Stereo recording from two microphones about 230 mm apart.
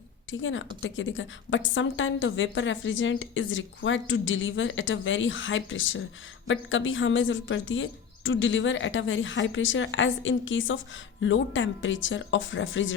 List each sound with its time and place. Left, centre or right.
0.3 s a woman's voice: left